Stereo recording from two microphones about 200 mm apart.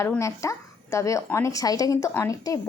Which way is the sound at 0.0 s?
15° left (ahead or behind).